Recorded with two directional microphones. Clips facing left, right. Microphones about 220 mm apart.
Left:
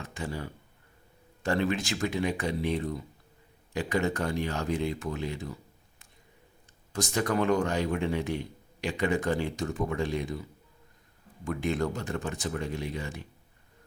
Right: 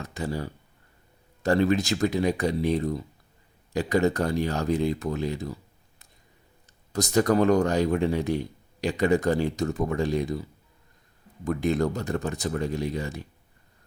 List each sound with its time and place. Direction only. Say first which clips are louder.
0.0 s speech: right 5 dB; 40° right (ahead or behind)
6.9 s speech: right 7 dB; 40° right (ahead or behind)
11.4 s speech: right 5 dB; 40° right (ahead or behind)